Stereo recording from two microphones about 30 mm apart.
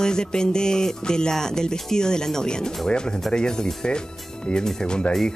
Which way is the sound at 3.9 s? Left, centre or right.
Left.